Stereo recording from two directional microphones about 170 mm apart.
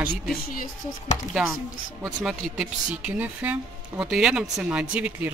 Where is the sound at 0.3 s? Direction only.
55° left (ahead or behind).